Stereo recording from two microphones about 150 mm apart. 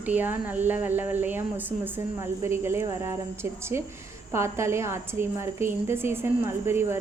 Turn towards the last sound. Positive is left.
turn(degrees=-15)  # may be behind; listen again after turning